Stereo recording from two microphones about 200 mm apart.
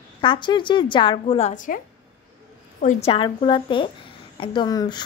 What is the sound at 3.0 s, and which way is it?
A woman's voice, 25° left (ahead or behind).